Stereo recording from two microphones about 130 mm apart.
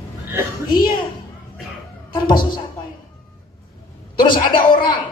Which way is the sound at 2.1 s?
35° left (ahead or behind).